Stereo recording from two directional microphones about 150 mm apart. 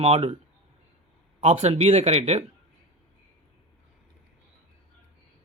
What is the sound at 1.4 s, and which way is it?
Speech, 45° right (ahead or behind).